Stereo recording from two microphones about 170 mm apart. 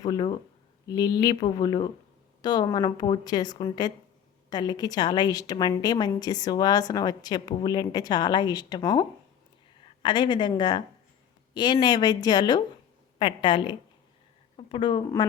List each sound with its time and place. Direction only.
0.0 s a woman's voice: 25° left (ahead or behind)